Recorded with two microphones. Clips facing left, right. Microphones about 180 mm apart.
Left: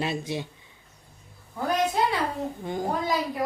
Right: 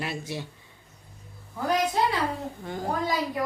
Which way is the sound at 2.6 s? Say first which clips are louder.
Left 3 dB; 15° left (ahead or behind).